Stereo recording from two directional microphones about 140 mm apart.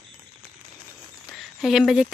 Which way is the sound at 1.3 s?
Centre (ahead or behind).